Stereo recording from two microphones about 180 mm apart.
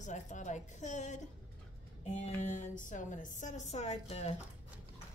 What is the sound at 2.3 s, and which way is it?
A woman's voice, 45° left (ahead or behind).